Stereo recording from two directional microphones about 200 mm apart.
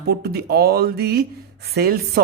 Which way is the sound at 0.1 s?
55° right (ahead or behind).